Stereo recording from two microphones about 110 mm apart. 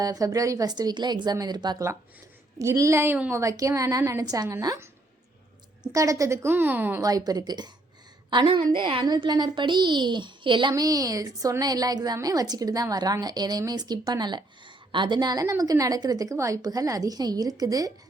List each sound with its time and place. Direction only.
0.0 s a woman's voice: 35° right (ahead or behind)
2.6 s a woman's voice: 30° right (ahead or behind)
5.8 s a woman's voice: 30° right (ahead or behind)
7.0 s a woman's voice: 35° right (ahead or behind)
10.8 s a woman's voice: 35° right (ahead or behind)